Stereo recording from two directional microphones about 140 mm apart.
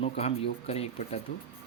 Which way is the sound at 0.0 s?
45° left (ahead or behind).